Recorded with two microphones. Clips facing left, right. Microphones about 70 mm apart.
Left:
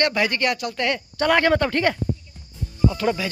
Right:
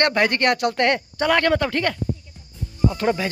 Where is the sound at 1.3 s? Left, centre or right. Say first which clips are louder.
Left 1 dB; centre.